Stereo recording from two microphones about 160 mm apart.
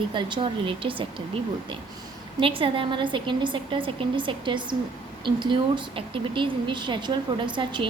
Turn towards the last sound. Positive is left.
turn(degrees=-30)  # may be behind; listen again after turning